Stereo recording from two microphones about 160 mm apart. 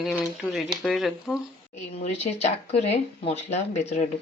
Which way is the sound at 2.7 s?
40° left (ahead or behind).